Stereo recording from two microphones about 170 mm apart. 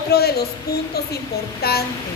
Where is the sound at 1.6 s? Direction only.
65° left (ahead or behind).